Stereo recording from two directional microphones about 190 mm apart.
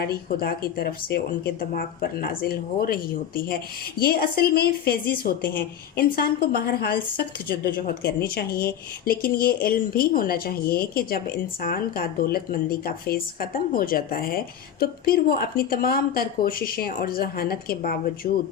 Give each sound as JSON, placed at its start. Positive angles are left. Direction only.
{"t": 0.1, "sound": "speech", "side_deg": 55}